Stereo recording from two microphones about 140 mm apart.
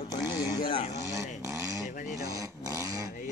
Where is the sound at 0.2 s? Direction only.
20° right (ahead or behind).